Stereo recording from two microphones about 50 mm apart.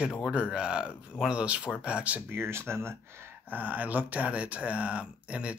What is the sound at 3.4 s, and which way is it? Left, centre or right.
Speech, right.